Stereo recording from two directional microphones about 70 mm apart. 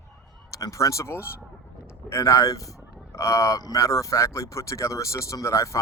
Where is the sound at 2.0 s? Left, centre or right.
Left.